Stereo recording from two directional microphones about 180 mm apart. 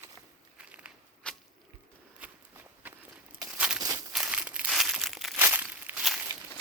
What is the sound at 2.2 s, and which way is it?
Walk, 10° right (ahead or behind).